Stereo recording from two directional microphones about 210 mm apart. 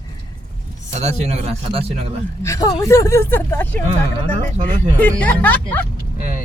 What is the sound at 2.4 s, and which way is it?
Speech, 15° left (ahead or behind).